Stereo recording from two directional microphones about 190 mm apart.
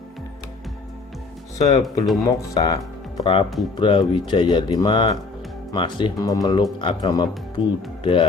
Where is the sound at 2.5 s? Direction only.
20° left (ahead or behind).